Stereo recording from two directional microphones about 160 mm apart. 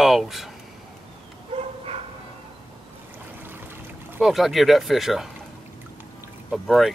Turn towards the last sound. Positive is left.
turn(degrees=0)  # may be behind; listen again after turning